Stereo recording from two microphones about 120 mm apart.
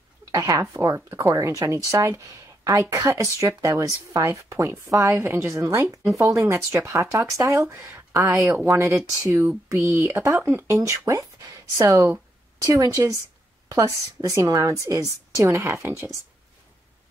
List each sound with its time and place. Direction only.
0.3 s speech: 25° right (ahead or behind)